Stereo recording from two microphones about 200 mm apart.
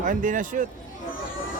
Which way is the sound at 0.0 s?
40° right (ahead or behind).